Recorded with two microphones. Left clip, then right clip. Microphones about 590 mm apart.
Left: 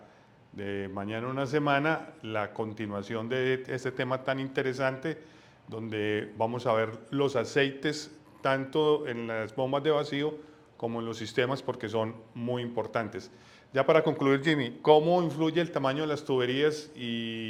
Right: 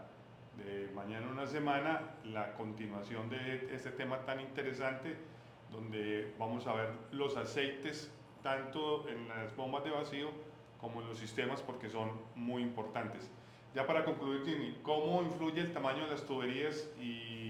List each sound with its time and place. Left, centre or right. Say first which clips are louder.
0.7 s a man's voice: left 9 dB; left